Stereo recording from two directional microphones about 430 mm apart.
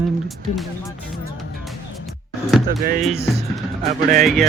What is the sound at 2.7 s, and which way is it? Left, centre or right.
Speech, centre.